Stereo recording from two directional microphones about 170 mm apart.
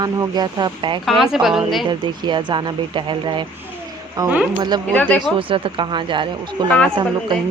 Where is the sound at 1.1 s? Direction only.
Centre (ahead or behind).